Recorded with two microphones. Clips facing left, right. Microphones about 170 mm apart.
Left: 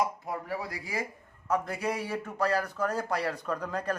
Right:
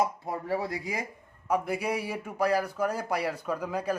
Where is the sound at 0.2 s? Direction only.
25° right (ahead or behind).